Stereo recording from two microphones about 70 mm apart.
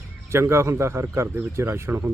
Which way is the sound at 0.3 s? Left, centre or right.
Right.